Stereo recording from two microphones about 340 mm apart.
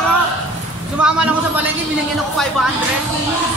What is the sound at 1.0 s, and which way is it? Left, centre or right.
Speech, centre.